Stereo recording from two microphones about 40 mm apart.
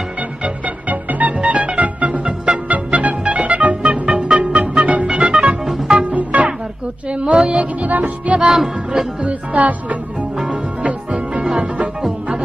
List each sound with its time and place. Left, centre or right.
0.2 s music: right
1.4 s music: right
7.9 s speech: right
8.4 s music: centre
9.2 s speech: right
11.5 s music: right